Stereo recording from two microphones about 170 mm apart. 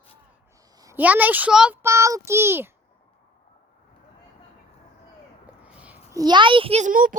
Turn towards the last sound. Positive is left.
turn(degrees=-55)  # may be behind; listen again after turning